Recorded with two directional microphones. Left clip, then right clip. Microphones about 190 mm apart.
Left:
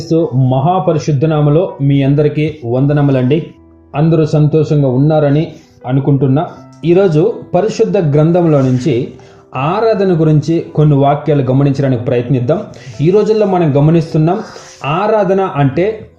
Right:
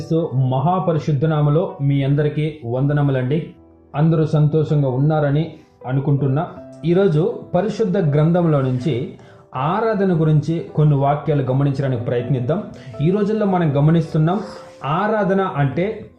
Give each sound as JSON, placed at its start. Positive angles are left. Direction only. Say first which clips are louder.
{"t": 0.1, "sound": "speech", "louder": "left 8 dB", "side_deg": 30}